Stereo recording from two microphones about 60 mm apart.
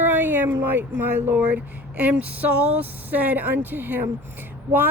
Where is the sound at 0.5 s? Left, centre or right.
Right.